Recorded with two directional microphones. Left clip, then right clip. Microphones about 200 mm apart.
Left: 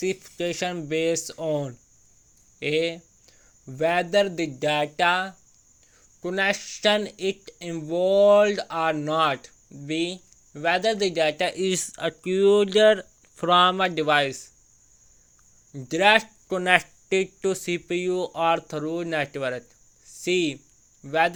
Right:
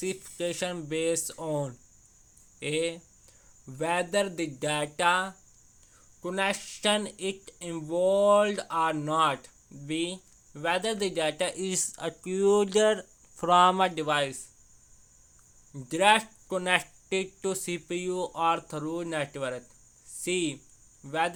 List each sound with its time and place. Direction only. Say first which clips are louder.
0.0 s speech: left 5 dB; 20° left (ahead or behind)
13.9 s speech: left 6 dB; 20° left (ahead or behind)
15.7 s speech: left 4 dB; 20° left (ahead or behind)
20.1 s a sound: left 6 dB; 20° left (ahead or behind)
21.0 s speech: left 7 dB; 20° left (ahead or behind)